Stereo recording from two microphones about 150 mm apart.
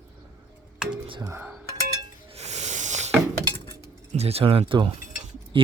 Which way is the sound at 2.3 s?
45° right (ahead or behind).